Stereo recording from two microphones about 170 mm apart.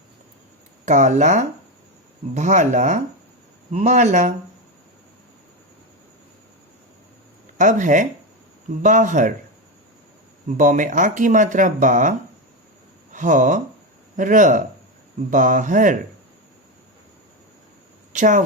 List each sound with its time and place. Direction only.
0.9 s speech: 45° right (ahead or behind)
7.6 s speech: 50° right (ahead or behind)
10.6 s speech: 50° right (ahead or behind)
13.1 s speech: 50° right (ahead or behind)
18.1 s speech: 45° right (ahead or behind)